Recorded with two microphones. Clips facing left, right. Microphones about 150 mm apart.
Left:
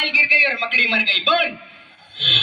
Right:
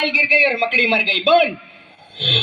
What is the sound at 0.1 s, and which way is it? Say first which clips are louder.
Speech: right 7 dB; 30° right (ahead or behind).